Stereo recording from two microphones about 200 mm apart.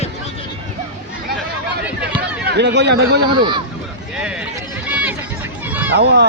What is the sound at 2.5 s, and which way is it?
Speech, 55° right (ahead or behind).